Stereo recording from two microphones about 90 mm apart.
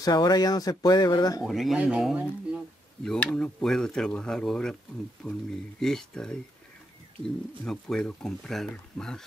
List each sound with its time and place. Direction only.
0.0 s speech: 45° left (ahead or behind)
1.5 s speech: centre (ahead or behind)
3.0 s speech: 10° left (ahead or behind)
7.6 s speech: 5° left (ahead or behind)